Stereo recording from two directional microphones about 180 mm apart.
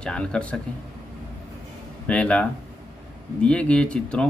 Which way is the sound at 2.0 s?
5° left (ahead or behind).